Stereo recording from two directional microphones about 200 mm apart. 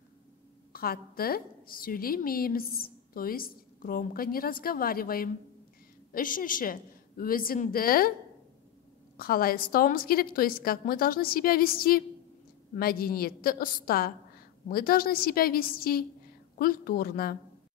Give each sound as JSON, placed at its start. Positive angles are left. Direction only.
{"t": 0.7, "sound": "a woman's voice", "side_deg": 50}
{"t": 9.1, "sound": "a woman's voice", "side_deg": 45}